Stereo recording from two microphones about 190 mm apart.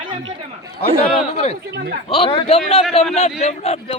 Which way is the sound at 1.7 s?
55° right (ahead or behind).